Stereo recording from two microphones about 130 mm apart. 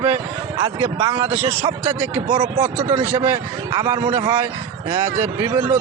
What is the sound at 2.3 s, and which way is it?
Speech, 40° right (ahead or behind).